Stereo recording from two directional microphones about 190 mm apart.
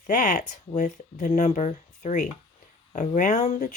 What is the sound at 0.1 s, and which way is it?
Speech, 45° left (ahead or behind).